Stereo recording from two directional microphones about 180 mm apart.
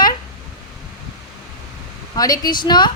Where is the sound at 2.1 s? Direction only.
20° left (ahead or behind).